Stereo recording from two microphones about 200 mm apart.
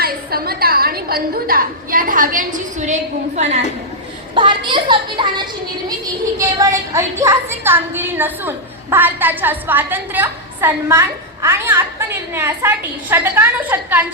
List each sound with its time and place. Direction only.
0.0 s a woman's voice: 50° right (ahead or behind)
4.4 s a woman's voice: 25° right (ahead or behind)